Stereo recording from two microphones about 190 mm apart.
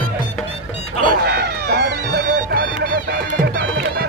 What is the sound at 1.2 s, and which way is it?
Music, 60° right (ahead or behind).